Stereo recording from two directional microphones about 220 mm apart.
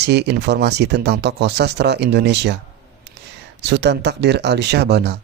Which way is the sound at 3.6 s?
50° right (ahead or behind).